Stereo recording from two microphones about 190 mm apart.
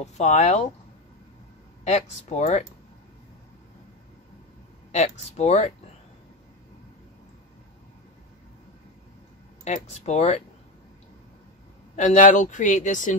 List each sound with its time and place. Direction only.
0.0 s speech: 40° left (ahead or behind)
1.9 s speech: 35° left (ahead or behind)
4.9 s speech: 35° left (ahead or behind)
9.7 s speech: 35° left (ahead or behind)
11.9 s speech: 40° left (ahead or behind)